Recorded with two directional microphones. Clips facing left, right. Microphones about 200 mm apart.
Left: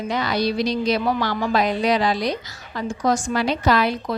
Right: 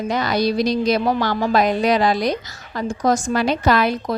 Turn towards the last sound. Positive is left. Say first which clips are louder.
# right 2 dB
turn(degrees=-50)  # may be behind; listen again after turning